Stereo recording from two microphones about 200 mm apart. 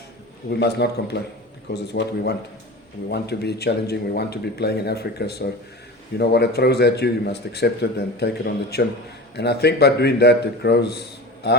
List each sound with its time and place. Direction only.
0.6 s a man's voice: 55° left (ahead or behind)